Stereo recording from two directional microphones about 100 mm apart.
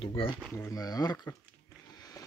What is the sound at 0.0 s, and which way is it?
Speech, 65° left (ahead or behind).